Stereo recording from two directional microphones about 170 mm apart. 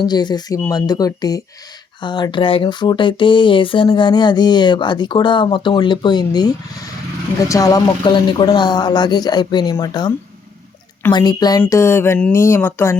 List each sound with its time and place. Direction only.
0.0 s speech: 25° left (ahead or behind)
11.1 s speech: 25° left (ahead or behind)